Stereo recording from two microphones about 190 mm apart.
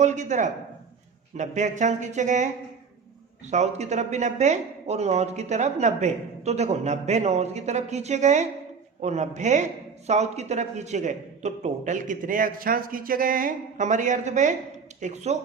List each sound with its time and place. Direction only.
0.0 s speech: 40° right (ahead or behind)